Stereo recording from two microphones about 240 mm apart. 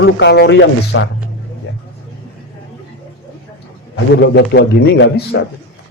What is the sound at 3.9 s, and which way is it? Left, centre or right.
A man's voice, left.